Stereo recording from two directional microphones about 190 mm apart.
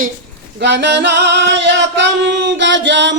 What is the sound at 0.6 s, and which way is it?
Singing, 65° right (ahead or behind).